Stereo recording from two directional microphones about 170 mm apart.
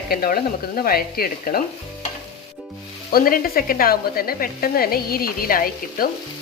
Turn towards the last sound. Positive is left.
turn(degrees=60)  # may be behind; listen again after turning